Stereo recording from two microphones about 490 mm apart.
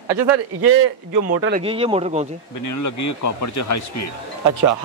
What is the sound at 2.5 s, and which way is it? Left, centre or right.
Speech, left.